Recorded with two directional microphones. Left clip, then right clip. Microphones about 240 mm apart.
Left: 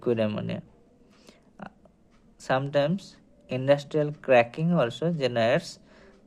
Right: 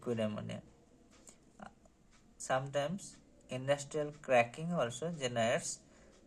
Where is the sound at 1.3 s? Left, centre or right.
Left.